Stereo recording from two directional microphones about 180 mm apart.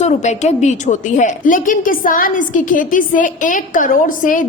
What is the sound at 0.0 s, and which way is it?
A woman's voice, 40° left (ahead or behind).